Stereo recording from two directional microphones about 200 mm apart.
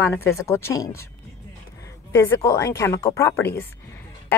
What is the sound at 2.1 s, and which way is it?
A woman's voice, 15° left (ahead or behind).